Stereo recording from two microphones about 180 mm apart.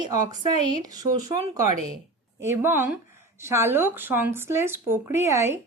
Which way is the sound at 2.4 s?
10° right (ahead or behind).